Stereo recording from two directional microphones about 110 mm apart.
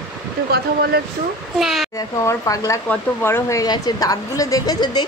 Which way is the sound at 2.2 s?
30° left (ahead or behind).